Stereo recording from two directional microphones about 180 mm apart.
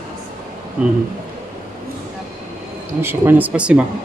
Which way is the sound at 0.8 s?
5° right (ahead or behind).